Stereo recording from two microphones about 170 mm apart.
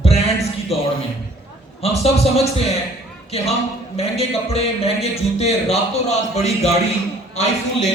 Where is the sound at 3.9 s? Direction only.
35° left (ahead or behind).